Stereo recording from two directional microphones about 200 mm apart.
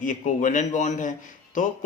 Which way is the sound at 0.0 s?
40° left (ahead or behind).